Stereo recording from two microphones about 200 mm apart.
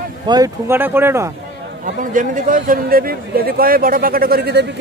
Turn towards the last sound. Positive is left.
turn(degrees=-55)  # may be behind; listen again after turning